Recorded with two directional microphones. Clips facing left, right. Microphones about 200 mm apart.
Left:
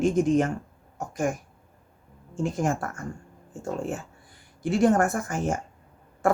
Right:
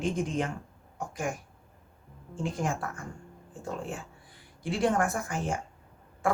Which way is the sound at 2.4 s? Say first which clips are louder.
Left 5 dB; 45° left (ahead or behind).